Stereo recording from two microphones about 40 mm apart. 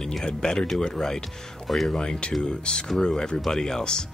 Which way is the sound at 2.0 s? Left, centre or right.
Left.